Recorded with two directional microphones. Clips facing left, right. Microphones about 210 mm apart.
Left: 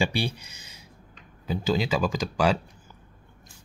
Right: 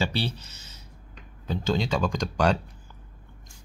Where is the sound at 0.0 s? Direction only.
10° left (ahead or behind).